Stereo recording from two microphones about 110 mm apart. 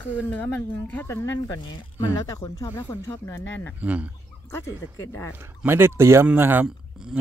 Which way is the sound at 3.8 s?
15° right (ahead or behind).